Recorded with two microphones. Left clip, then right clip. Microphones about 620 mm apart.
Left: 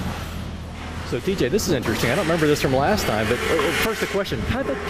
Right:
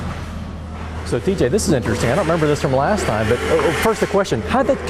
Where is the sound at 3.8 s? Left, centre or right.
Right.